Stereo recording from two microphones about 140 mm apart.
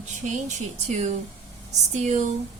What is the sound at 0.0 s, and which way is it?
Speech, 60° right (ahead or behind).